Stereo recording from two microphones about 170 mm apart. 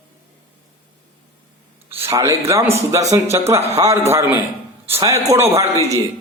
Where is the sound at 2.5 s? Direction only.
15° right (ahead or behind).